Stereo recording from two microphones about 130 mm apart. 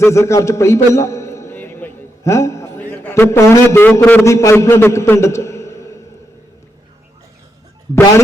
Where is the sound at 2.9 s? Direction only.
20° left (ahead or behind).